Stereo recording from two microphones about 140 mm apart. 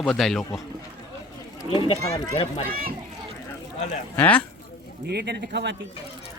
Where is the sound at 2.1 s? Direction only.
25° left (ahead or behind).